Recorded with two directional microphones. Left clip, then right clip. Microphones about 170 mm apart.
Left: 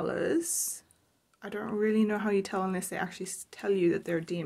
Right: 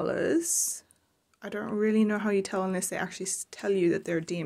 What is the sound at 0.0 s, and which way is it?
Speech, 25° right (ahead or behind).